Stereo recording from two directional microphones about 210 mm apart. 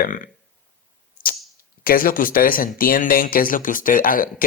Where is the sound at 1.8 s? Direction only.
40° left (ahead or behind).